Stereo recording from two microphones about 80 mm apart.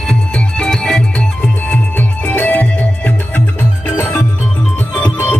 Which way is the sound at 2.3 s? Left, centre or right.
Left.